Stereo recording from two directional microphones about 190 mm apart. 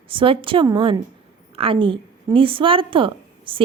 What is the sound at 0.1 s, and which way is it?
A woman's voice, 25° right (ahead or behind).